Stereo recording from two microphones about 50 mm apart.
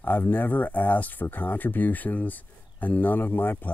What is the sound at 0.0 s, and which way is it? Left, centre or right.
Speech, left.